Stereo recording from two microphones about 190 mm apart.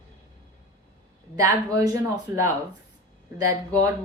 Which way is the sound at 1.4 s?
20° right (ahead or behind).